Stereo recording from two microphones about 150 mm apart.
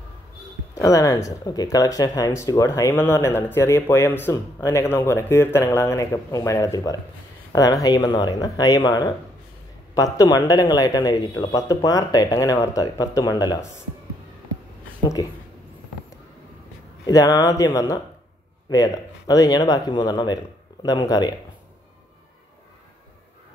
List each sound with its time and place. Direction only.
0.7 s speech: 20° left (ahead or behind)
15.2 s speech: 25° left (ahead or behind)
17.0 s speech: 25° left (ahead or behind)